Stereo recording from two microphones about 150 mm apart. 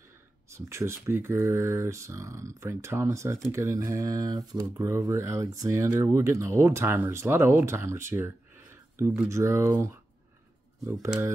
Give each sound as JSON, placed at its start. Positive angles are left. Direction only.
{"t": 0.5, "sound": "speech", "side_deg": -20}